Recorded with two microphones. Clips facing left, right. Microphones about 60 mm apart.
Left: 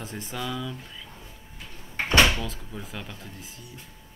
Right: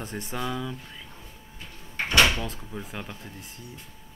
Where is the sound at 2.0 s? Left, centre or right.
Left.